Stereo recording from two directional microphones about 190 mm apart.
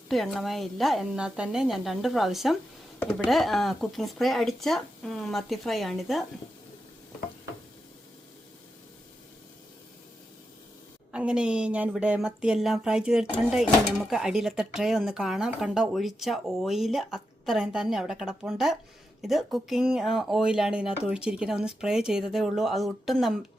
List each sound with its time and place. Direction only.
0.1 s a woman's voice: centre (ahead or behind)
11.1 s a woman's voice: 5° right (ahead or behind)